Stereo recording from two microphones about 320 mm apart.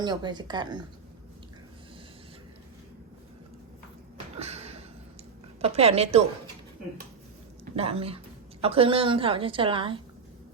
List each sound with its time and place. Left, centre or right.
0.0 s a woman's voice: centre
4.4 s a sound: centre
5.6 s a woman's voice: centre
7.6 s a woman's voice: centre